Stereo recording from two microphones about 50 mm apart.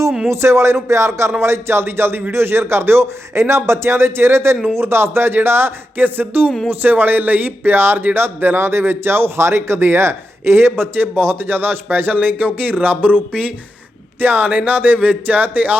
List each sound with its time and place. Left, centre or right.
0.3 s a man's voice: right
14.2 s speech: right